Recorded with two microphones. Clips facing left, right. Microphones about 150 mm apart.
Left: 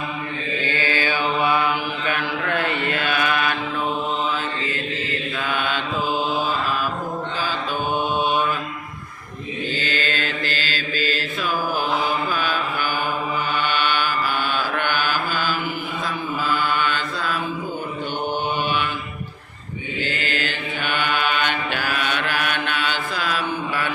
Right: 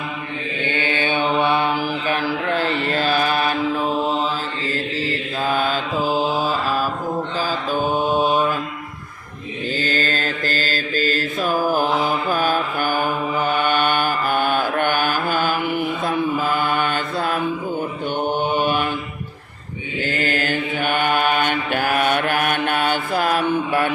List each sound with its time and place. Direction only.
0.6 s mantra: 25° right (ahead or behind); by 8.4 s 40° right (ahead or behind)
9.7 s mantra: 40° right (ahead or behind)
20.1 s mantra: 45° right (ahead or behind)